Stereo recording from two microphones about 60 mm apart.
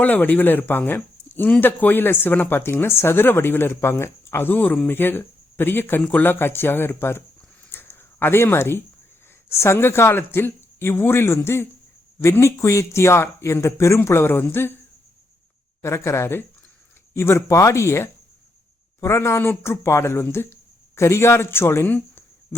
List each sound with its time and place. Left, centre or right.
0.0 s speech: left
7.7 s a sound: left
9.5 s speech: left
15.8 s speech: left
19.4 s speech: left